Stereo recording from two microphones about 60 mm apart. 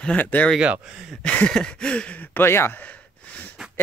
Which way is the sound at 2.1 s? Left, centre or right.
Left.